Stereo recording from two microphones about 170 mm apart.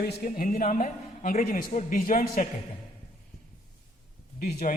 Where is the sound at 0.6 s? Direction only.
45° left (ahead or behind).